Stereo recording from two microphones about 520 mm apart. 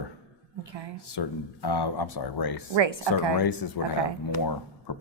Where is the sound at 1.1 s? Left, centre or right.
Left.